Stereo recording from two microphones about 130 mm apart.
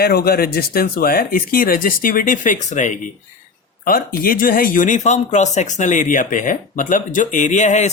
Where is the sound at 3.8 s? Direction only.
90° left.